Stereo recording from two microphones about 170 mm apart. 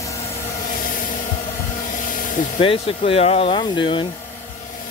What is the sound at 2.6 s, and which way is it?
Speech, 35° left (ahead or behind).